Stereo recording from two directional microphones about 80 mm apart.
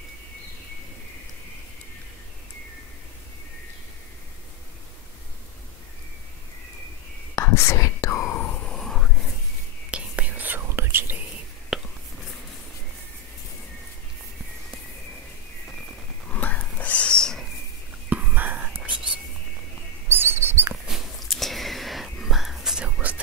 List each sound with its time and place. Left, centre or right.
7.3 s whispering: left
8.6 s a sound: centre
9.8 s whispering: centre
11.7 s whispering: centre
16.3 s whispering: left
18.1 s whispering: right
20.1 s bird: right
20.9 s a sound: centre